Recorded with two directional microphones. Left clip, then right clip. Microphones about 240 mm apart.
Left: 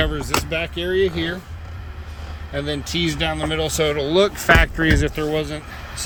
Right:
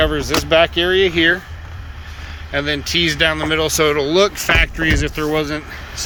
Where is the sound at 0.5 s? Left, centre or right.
Centre.